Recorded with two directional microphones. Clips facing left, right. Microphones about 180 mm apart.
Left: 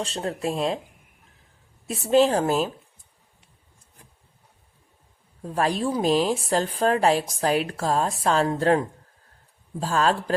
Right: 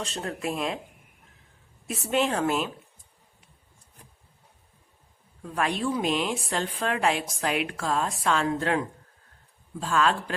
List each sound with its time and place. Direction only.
0.0 s a woman's voice: 30° left (ahead or behind)
1.9 s a woman's voice: 30° left (ahead or behind)
5.4 s a woman's voice: 35° left (ahead or behind)
9.8 s a woman's voice: 35° left (ahead or behind)